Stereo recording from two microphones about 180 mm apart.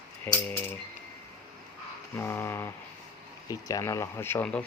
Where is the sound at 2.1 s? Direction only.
15° left (ahead or behind).